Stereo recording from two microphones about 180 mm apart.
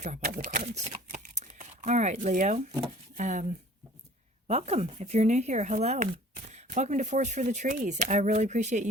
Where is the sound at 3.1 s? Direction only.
40° right (ahead or behind).